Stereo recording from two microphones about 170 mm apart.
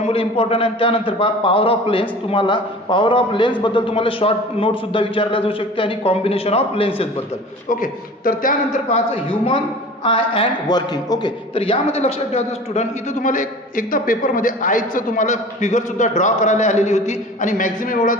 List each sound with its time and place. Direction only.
0.0 s a man's voice: 35° left (ahead or behind)
7.7 s a man's voice: 55° left (ahead or behind)
10.0 s a man's voice: 30° left (ahead or behind); by 18.2 s 55° left (ahead or behind)